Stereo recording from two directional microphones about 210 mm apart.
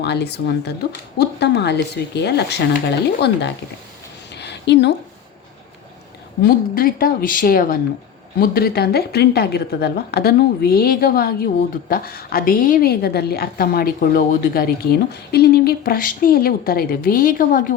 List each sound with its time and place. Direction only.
0.0 s a woman's voice: 55° left (ahead or behind)
4.4 s a sound: 55° left (ahead or behind)
6.4 s a woman's voice: 45° left (ahead or behind)